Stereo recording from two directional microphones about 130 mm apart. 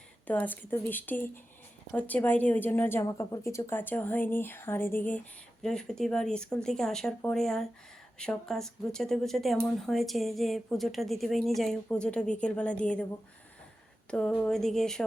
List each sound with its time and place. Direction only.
0.3 s a woman's voice: 15° left (ahead or behind)
14.1 s a woman's voice: 10° left (ahead or behind)